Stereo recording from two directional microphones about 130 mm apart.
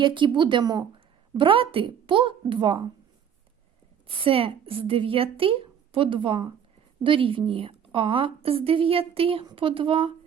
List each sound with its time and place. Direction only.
0.0 s a woman's voice: 40° right (ahead or behind)
4.0 s a woman's voice: 45° right (ahead or behind)